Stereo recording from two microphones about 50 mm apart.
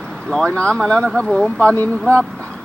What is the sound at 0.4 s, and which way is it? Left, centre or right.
Speech, centre.